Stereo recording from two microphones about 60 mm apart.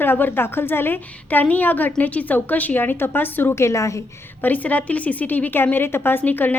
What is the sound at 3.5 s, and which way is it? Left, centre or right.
Speech, left.